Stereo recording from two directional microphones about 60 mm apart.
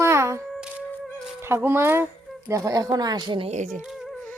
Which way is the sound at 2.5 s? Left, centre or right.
Right.